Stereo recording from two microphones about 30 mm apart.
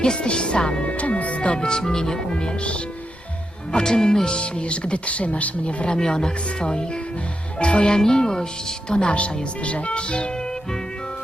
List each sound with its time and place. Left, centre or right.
0.2 s speech: left
0.9 s speech: left
1.4 s speech: left
3.8 s speech: left
5.6 s speech: left
6.0 s speech: left
7.9 s speech: left
8.9 s speech: left